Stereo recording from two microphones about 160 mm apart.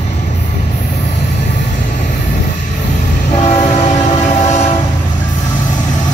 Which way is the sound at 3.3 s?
45° left (ahead or behind).